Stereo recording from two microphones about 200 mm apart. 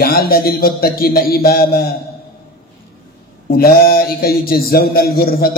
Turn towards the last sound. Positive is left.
turn(degrees=50)  # may be behind; listen again after turning